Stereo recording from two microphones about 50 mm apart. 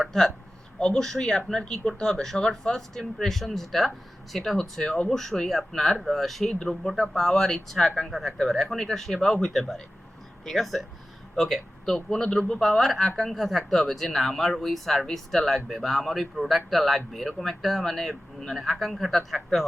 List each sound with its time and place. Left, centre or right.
0.0 s speech: centre
0.8 s speech: centre
11.9 s speech: centre